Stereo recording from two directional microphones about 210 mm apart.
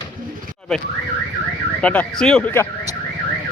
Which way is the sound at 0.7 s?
Centre (ahead or behind).